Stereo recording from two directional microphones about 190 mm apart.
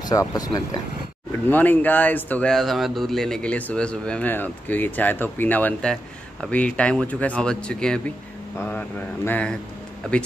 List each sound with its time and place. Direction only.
0.1 s speech: 20° left (ahead or behind)